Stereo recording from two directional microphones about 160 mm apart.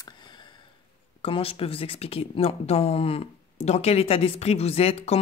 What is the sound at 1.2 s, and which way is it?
Speech, 35° left (ahead or behind).